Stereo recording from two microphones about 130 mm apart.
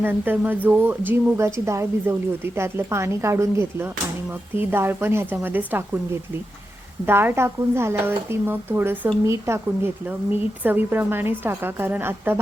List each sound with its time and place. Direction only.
0.0 s a woman's voice: 15° right (ahead or behind)
7.0 s a woman's voice: 15° right (ahead or behind)